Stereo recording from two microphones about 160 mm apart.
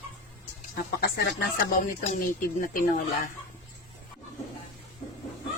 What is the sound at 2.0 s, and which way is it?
Speech, 60° left (ahead or behind).